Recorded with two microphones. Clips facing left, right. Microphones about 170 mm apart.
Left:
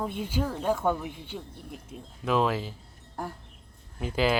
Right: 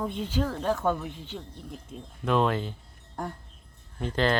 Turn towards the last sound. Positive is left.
turn(degrees=5)  # may be behind; listen again after turning